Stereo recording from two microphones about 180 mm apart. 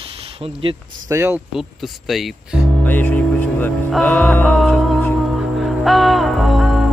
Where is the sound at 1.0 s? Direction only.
15° right (ahead or behind).